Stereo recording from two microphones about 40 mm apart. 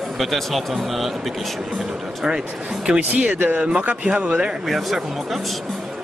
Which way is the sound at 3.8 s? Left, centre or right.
Right.